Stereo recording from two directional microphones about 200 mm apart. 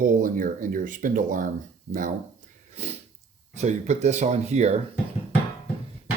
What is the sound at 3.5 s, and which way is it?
Speech, 35° right (ahead or behind).